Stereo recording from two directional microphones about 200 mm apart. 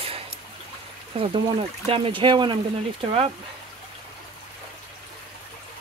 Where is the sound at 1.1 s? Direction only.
30° right (ahead or behind).